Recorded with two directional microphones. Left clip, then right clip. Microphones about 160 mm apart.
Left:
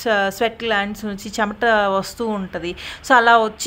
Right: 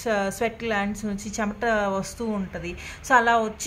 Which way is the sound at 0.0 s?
30° left (ahead or behind).